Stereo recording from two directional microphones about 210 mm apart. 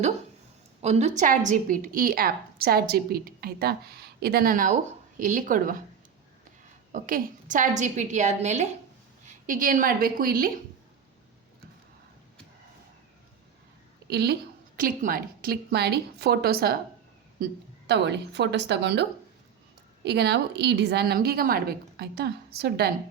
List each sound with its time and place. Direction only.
0.8 s a woman's voice: 30° right (ahead or behind)
6.9 s a woman's voice: 40° right (ahead or behind)
14.1 s a woman's voice: 50° right (ahead or behind)
20.1 s a woman's voice: 50° right (ahead or behind)